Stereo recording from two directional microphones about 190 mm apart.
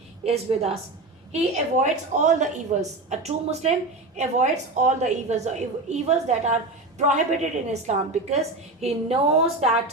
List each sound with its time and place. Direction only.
0.3 s a woman's voice: 35° right (ahead or behind)
7.7 s a woman's voice: 35° right (ahead or behind)